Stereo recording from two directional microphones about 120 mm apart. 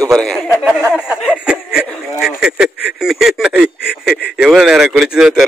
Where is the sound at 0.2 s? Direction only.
5° left (ahead or behind).